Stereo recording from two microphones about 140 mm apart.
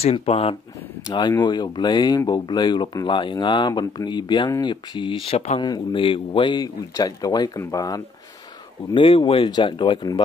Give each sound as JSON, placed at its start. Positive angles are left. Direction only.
{"t": 0.0, "sound": "speech", "side_deg": 45}
{"t": 1.0, "sound": "speech", "side_deg": 30}
{"t": 8.9, "sound": "speech", "side_deg": 40}